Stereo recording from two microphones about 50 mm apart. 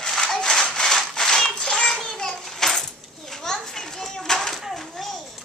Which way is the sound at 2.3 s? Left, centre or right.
Centre.